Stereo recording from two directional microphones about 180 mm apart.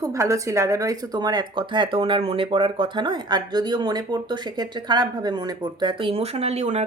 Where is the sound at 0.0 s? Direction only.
15° right (ahead or behind).